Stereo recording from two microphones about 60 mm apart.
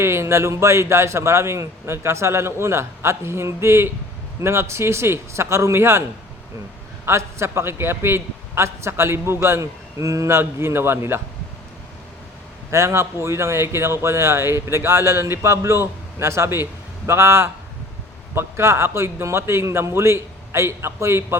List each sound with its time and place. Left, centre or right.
0.0 s a man's voice: right
7.0 s a man's voice: right
12.7 s a man's voice: right